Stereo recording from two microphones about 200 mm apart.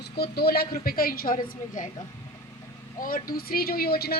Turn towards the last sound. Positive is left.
turn(degrees=50)  # may be behind; listen again after turning